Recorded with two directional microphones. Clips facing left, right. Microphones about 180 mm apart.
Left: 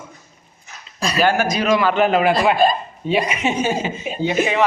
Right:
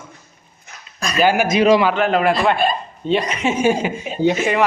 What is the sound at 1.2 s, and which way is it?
Speech, 10° right (ahead or behind).